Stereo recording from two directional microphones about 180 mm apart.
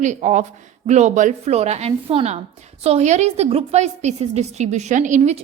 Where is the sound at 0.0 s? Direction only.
40° right (ahead or behind).